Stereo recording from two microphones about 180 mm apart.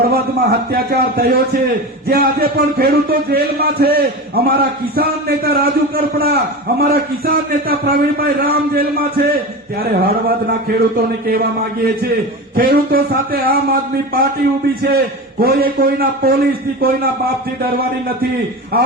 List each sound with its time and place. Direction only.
0.0 s a man's voice: 60° right (ahead or behind)